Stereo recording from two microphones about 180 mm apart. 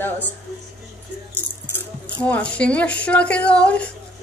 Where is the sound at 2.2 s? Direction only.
5° left (ahead or behind).